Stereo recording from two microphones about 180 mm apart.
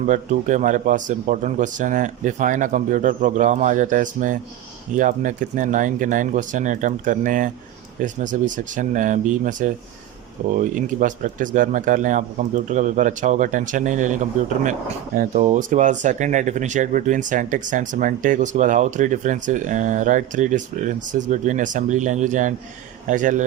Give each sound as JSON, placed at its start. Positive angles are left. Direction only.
{"t": 0.0, "sound": "speech", "side_deg": -45}